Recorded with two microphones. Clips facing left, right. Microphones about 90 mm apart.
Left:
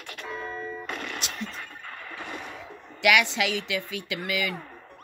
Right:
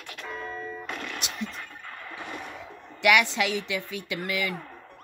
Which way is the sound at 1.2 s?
10° right (ahead or behind).